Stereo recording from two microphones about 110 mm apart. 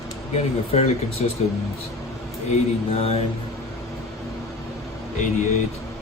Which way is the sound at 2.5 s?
65° left (ahead or behind).